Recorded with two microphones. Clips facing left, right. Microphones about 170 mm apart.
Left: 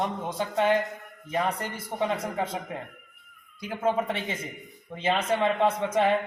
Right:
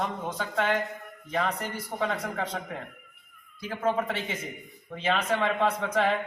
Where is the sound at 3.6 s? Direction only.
20° left (ahead or behind).